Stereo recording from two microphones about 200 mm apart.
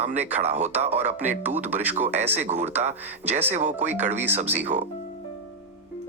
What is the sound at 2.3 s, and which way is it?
Speech, 35° right (ahead or behind).